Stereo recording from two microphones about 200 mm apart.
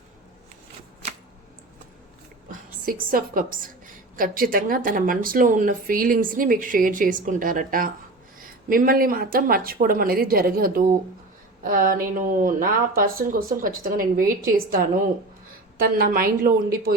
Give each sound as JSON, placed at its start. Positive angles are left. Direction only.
{"t": 2.5, "sound": "a woman's voice", "side_deg": -45}